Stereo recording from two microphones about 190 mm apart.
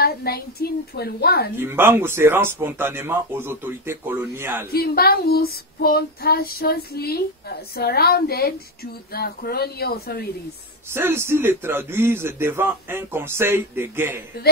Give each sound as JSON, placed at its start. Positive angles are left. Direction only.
{"t": 0.0, "sound": "child singing", "side_deg": 55}
{"t": 1.6, "sound": "a man's voice", "side_deg": -10}
{"t": 4.6, "sound": "child singing", "side_deg": 55}
{"t": 10.9, "sound": "a man's voice", "side_deg": -10}